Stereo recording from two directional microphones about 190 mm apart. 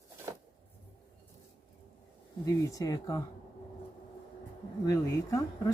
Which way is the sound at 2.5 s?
15° left (ahead or behind).